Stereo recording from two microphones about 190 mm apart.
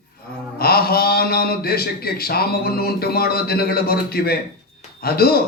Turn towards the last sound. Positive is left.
turn(degrees=55)  # may be behind; listen again after turning